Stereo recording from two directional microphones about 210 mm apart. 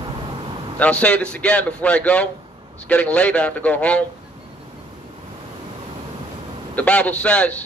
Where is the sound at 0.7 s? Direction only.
5° left (ahead or behind).